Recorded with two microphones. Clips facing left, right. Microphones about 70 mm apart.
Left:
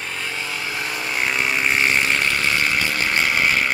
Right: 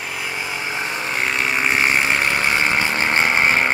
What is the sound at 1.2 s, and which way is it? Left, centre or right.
Vehicle, centre.